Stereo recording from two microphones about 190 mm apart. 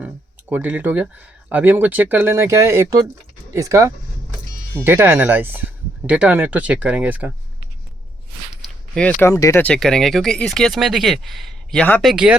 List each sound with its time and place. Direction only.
0.5 s speech: 10° right (ahead or behind)
9.0 s speech: 5° left (ahead or behind)
12.1 s speech: 5° right (ahead or behind)